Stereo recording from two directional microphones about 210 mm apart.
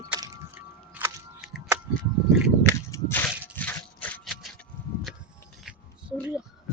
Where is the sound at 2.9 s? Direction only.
15° left (ahead or behind).